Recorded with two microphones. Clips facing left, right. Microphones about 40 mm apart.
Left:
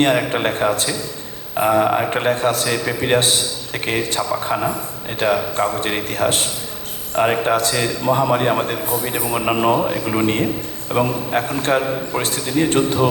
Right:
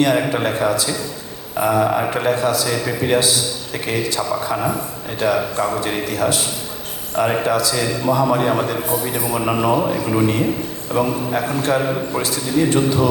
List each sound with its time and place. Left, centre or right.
0.0 s a man's voice: left
2.6 s a man's voice: left
3.2 s a man's voice: left